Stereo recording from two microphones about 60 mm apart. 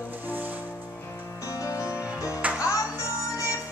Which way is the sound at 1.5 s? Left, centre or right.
Left.